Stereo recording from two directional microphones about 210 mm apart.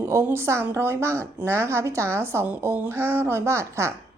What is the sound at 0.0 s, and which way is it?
A woman's voice, 10° right (ahead or behind).